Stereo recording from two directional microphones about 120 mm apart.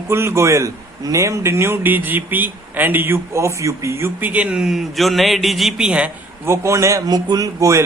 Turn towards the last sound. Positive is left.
turn(degrees=-25)  # may be behind; listen again after turning